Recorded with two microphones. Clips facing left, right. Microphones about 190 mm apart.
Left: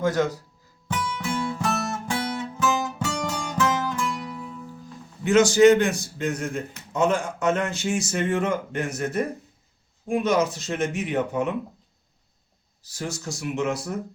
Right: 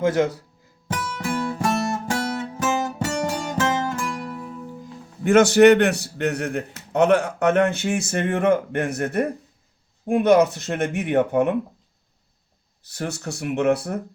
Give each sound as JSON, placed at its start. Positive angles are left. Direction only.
{"t": 0.9, "sound": "music", "side_deg": -50}
{"t": 5.2, "sound": "a man's voice", "side_deg": -55}
{"t": 12.8, "sound": "a man's voice", "side_deg": -60}